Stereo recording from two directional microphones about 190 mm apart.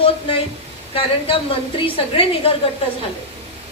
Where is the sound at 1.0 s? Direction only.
30° left (ahead or behind).